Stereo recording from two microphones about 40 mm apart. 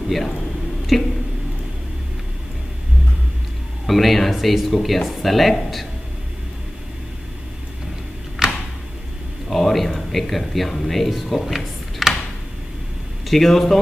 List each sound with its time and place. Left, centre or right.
0.9 s speech: centre
3.8 s speech: centre
8.4 s a sound: centre
9.5 s speech: centre
13.3 s speech: centre